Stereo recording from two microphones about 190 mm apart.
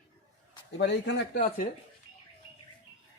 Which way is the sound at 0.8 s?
65° left (ahead or behind).